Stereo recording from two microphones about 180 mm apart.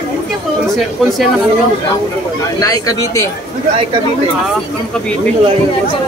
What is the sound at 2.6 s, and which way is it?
Speech, 20° left (ahead or behind).